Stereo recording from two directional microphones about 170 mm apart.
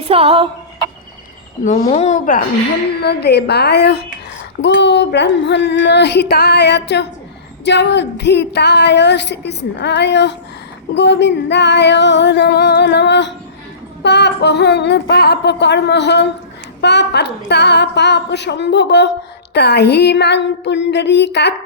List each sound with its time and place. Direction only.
0.0 s music: 35° right (ahead or behind)
1.6 s a woman's voice: 45° left (ahead or behind)
3.0 s a woman's voice: 75° left (ahead or behind)
4.6 s a woman's voice: 90° left
14.0 s a sound: 80° left
19.5 s a sound: 75° left (ahead or behind)